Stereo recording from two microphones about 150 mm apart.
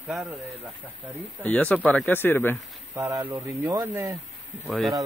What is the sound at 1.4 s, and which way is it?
Speech, 10° left (ahead or behind).